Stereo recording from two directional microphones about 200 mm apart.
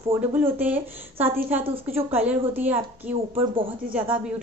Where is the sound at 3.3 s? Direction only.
25° right (ahead or behind).